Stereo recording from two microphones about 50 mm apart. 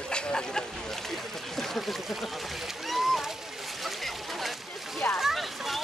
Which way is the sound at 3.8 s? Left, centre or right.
Centre.